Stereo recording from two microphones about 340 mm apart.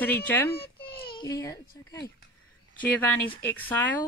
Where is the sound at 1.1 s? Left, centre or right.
Centre.